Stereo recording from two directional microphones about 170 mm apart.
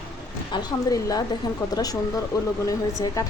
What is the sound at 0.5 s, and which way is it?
Speech, 20° left (ahead or behind).